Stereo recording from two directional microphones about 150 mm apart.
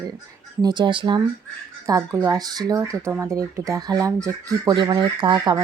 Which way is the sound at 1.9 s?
20° right (ahead or behind).